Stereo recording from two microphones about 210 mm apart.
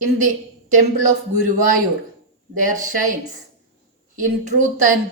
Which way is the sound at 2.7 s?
35° right (ahead or behind).